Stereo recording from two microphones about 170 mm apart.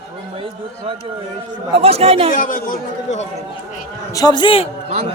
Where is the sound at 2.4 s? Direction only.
50° left (ahead or behind).